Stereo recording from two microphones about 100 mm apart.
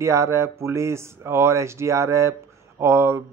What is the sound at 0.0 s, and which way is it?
A man's voice, 30° right (ahead or behind).